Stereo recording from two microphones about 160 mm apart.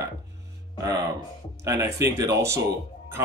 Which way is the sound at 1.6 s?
20° right (ahead or behind).